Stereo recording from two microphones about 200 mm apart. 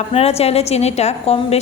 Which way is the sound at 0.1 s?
30° left (ahead or behind).